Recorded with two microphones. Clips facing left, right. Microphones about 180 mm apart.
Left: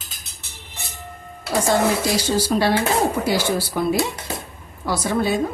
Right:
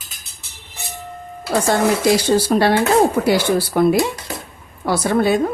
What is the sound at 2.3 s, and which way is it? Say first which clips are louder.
A woman's voice: right 4 dB; 60° right (ahead or behind).